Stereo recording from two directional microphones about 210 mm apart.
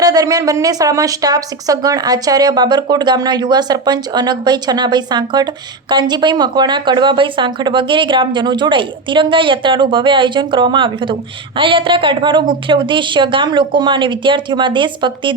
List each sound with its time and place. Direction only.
0.0 s a woman's voice: 15° right (ahead or behind)